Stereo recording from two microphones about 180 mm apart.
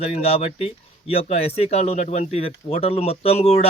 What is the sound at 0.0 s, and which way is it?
A man's voice, 35° left (ahead or behind).